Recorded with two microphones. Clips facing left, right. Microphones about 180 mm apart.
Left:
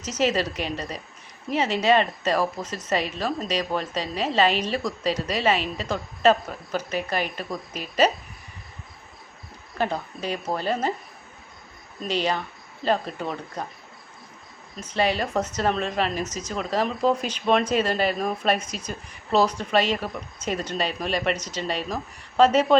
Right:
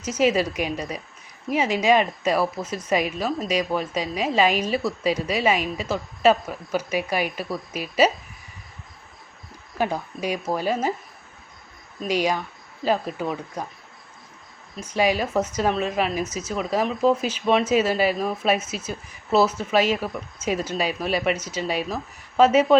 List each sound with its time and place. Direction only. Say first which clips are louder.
0.0 s speech: right 3 dB; 10° right (ahead or behind)
9.7 s speech: right 1 dB; 10° right (ahead or behind)
12.0 s speech: right 2 dB; 10° right (ahead or behind)
14.8 s speech: right 2 dB; 10° right (ahead or behind)